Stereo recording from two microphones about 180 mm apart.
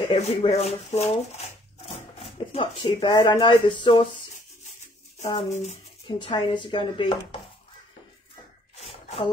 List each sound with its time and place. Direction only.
0.1 s speech: 35° left (ahead or behind)
5.5 s speech: 40° left (ahead or behind)
6.0 s speech: 25° left (ahead or behind)
8.8 s a sound: 35° left (ahead or behind)